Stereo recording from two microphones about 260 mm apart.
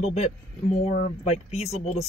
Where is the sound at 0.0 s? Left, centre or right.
Left.